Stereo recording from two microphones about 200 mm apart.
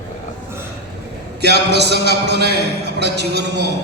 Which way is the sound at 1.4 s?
55° right (ahead or behind).